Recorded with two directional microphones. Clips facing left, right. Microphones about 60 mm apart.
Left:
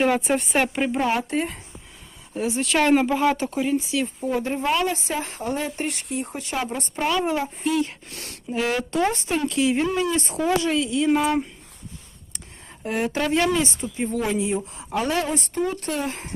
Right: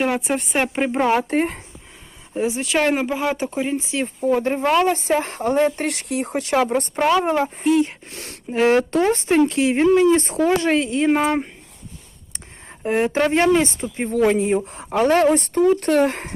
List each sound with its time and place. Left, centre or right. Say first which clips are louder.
0.0 s a woman's voice: even; centre
1.1 s a woman's voice: right 5 dB; right
2.3 s speech: right 3 dB; right
2.6 s speech: left 3 dB; centre; by 4.0 s right
4.0 s a woman's voice: right 5 dB; right
7.7 s speech: right 6 dB; right
12.6 s a woman's voice: right 6 dB; right